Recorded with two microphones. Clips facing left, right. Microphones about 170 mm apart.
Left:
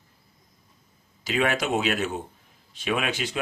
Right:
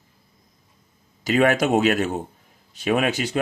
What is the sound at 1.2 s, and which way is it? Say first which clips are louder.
Speech: right 7 dB; 50° right (ahead or behind).